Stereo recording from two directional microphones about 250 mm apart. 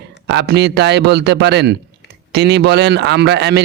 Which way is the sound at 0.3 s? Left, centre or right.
Right.